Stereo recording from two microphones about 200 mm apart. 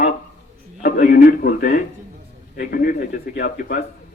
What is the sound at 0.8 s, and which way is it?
A man's voice, 45° left (ahead or behind).